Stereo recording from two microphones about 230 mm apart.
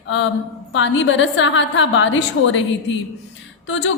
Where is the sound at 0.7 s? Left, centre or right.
Left.